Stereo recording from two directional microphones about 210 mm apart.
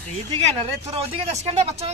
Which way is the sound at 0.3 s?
25° right (ahead or behind).